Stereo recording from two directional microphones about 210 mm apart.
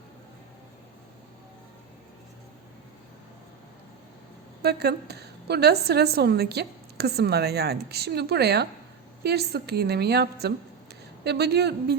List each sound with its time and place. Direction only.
4.6 s a woman's voice: 50° right (ahead or behind)